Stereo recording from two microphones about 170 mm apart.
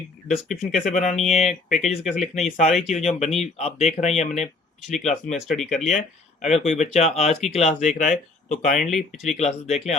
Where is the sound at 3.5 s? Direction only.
40° left (ahead or behind).